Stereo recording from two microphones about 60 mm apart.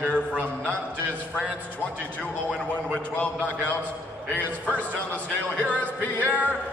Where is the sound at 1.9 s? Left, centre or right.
Left.